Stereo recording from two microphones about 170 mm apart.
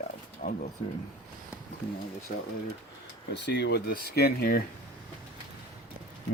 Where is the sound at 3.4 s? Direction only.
80° left.